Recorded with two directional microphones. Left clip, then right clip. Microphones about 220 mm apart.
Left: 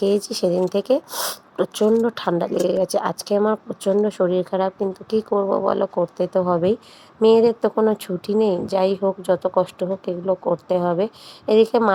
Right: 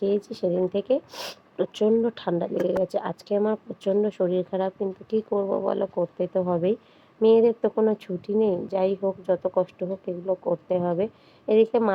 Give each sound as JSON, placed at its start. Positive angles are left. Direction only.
{"t": 0.3, "sound": "speech", "side_deg": 20}